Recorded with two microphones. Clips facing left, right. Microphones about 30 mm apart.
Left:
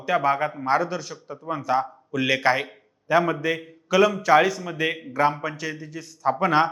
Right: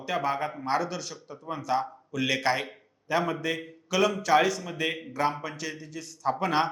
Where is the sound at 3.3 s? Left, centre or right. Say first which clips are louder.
Left 5 dB; centre.